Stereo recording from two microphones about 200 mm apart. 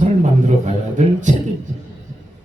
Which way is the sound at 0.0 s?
35° right (ahead or behind).